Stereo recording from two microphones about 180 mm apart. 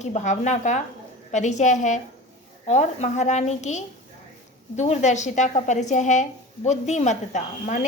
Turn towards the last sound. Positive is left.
turn(degrees=40)  # may be behind; listen again after turning